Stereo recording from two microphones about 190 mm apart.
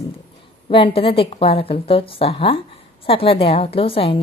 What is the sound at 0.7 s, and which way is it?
A woman's voice, 25° left (ahead or behind).